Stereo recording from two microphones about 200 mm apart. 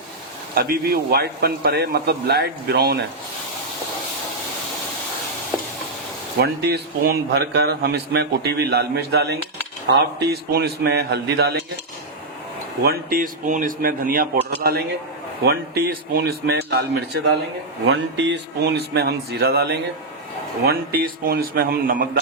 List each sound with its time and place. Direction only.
0.5 s a man's voice: 50° right (ahead or behind)
6.4 s a man's voice: 55° right (ahead or behind)
12.8 s a man's voice: 50° right (ahead or behind)